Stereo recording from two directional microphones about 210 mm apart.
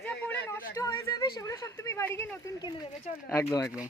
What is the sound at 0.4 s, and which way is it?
Speech, 15° left (ahead or behind).